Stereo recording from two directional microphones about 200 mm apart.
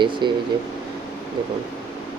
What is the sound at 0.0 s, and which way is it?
Speech, 25° right (ahead or behind).